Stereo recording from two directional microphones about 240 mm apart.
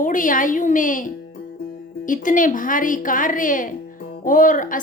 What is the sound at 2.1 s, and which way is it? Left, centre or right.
Speech, left.